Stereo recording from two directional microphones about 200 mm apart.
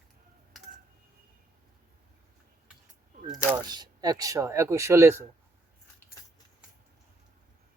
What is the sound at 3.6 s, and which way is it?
Speech, 20° right (ahead or behind).